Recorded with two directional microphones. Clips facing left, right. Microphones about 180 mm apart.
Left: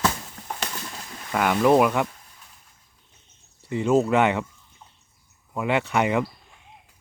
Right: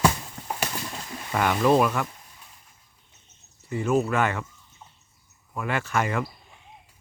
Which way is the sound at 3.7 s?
25° left (ahead or behind).